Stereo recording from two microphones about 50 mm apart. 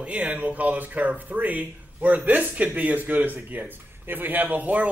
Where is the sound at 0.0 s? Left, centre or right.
Right.